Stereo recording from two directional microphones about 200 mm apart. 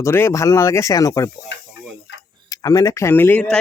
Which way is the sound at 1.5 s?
60° left (ahead or behind).